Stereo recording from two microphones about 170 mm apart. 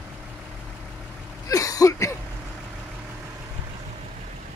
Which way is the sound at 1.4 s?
20° left (ahead or behind).